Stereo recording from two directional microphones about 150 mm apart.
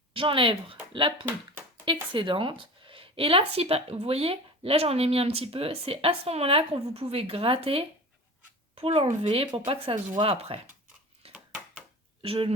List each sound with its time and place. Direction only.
0.1 s speech: 35° right (ahead or behind)
2.1 s speech: 35° right (ahead or behind)
11.3 s a sound: 10° right (ahead or behind)
12.2 s speech: 40° right (ahead or behind)